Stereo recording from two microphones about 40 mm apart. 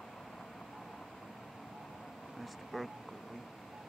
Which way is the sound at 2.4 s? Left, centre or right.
Centre.